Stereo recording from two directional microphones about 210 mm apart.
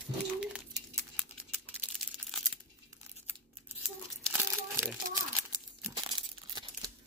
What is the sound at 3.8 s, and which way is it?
Crumpling, 5° right (ahead or behind).